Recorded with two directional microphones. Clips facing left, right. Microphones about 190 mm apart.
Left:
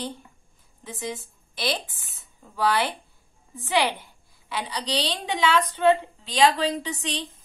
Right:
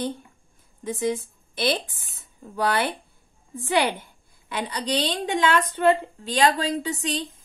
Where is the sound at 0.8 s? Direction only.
50° right (ahead or behind).